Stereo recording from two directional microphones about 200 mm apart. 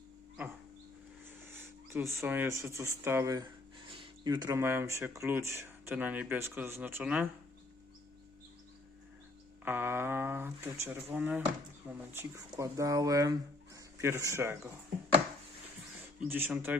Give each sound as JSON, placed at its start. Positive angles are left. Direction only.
{"t": 1.5, "sound": "speech", "side_deg": -10}
{"t": 9.6, "sound": "speech", "side_deg": -10}
{"t": 16.2, "sound": "speech", "side_deg": -10}